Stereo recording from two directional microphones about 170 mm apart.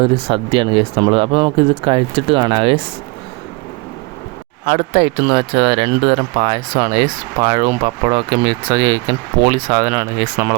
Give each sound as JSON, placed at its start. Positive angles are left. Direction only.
{"t": 0.0, "sound": "speech", "side_deg": -30}
{"t": 4.6, "sound": "speech", "side_deg": -30}
{"t": 8.0, "sound": "speech", "side_deg": -30}
{"t": 8.6, "sound": "speech", "side_deg": -20}